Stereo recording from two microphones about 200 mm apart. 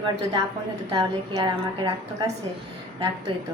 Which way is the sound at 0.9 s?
20° right (ahead or behind).